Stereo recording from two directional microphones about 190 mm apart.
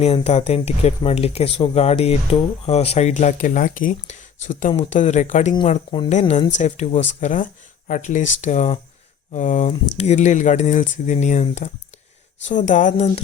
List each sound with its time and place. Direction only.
0.0 s speech: 35° left (ahead or behind)